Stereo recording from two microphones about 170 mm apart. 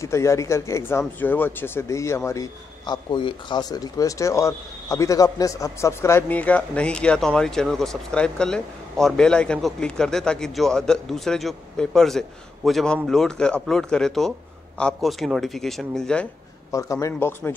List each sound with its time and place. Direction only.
0.0 s speech: 15° left (ahead or behind)
16.7 s a man's voice: 20° left (ahead or behind)